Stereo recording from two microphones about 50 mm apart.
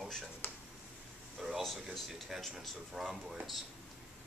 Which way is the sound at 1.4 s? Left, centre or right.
Centre.